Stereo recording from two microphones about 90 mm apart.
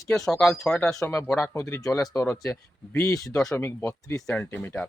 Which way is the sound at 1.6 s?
30° left (ahead or behind).